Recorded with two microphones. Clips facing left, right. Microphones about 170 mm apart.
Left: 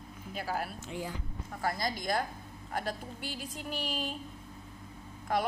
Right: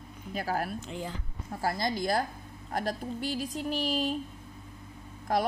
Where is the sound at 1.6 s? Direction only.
30° right (ahead or behind).